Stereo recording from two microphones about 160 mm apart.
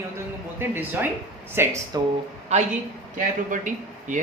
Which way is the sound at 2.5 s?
45° right (ahead or behind).